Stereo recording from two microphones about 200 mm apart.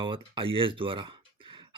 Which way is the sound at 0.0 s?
25° right (ahead or behind).